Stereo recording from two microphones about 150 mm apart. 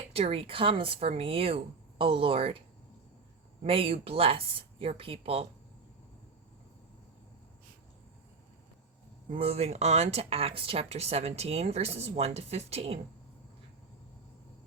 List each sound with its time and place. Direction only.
0.1 s speech: 40° right (ahead or behind)
3.6 s speech: 40° right (ahead or behind)
9.3 s speech: 40° right (ahead or behind)